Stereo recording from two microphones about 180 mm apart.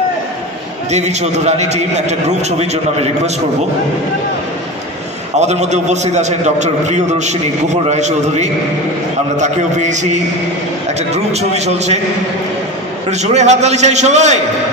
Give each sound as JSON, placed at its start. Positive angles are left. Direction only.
{"t": 0.9, "sound": "a man's voice", "side_deg": -40}
{"t": 5.4, "sound": "a man's voice", "side_deg": -40}
{"t": 13.1, "sound": "a man's voice", "side_deg": -40}